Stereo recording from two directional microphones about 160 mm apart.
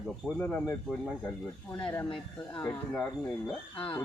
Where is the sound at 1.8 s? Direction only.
15° left (ahead or behind).